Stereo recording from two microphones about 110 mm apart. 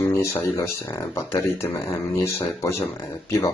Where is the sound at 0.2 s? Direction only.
20° left (ahead or behind).